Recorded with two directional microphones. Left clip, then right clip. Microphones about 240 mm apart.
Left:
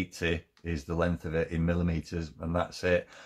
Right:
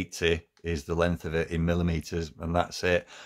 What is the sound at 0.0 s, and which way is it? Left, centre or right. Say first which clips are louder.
Speech: right 5 dB; right.